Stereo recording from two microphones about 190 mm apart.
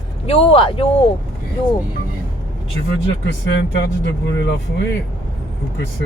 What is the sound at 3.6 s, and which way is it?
Speech, 65° left (ahead or behind).